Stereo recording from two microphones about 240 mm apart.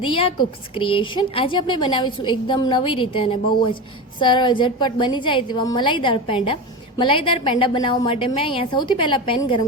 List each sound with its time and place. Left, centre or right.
0.0 s a woman's voice: left